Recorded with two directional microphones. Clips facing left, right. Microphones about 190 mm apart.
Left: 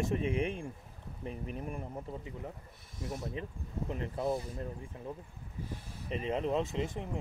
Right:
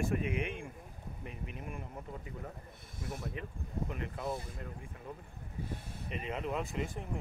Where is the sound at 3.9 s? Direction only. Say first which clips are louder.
Left 8 dB; 30° left (ahead or behind).